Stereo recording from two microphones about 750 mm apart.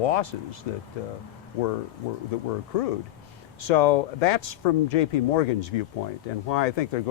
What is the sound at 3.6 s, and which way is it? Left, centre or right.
Speech, left.